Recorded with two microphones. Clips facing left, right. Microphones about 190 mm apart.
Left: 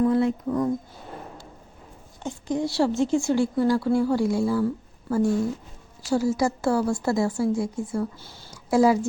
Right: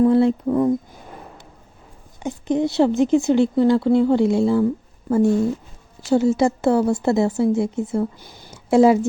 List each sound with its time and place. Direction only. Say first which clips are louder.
0.0 s speech: right 6 dB; 30° right (ahead or behind)
2.2 s a woman's voice: right 6 dB; 20° right (ahead or behind)